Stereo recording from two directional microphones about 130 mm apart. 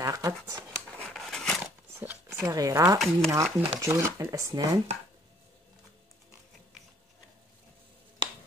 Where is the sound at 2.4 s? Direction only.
25° right (ahead or behind).